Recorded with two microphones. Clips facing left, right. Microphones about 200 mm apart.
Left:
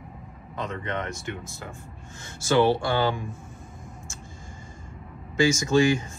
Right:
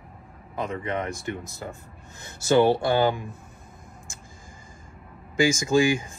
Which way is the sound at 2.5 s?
20° right (ahead or behind).